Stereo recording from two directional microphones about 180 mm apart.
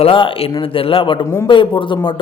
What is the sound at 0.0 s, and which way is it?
A man's voice, 30° left (ahead or behind).